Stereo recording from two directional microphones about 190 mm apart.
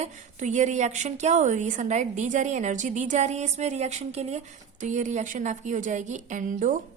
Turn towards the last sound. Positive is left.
turn(degrees=-45)  # may be behind; listen again after turning